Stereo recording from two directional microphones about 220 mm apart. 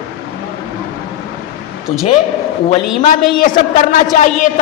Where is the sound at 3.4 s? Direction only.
30° left (ahead or behind).